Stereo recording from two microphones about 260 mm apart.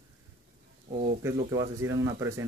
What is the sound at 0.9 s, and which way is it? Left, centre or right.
Speech, right.